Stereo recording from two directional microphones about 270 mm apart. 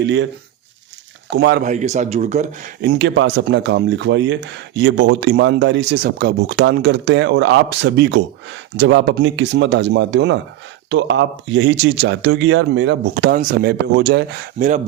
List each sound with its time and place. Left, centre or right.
0.0 s speech: right
1.3 s speech: right
2.8 s speech: right